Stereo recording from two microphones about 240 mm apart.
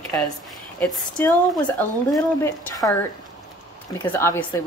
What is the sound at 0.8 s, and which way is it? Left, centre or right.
Speech, centre.